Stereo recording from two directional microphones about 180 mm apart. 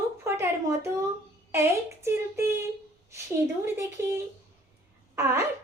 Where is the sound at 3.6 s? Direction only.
15° right (ahead or behind).